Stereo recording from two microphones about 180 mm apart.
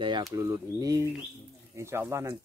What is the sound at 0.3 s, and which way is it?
Speech, 15° right (ahead or behind).